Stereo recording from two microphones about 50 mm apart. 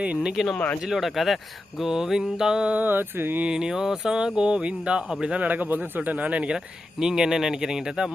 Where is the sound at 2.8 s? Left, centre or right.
Right.